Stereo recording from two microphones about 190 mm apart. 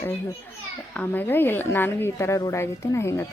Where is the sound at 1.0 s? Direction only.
10° left (ahead or behind).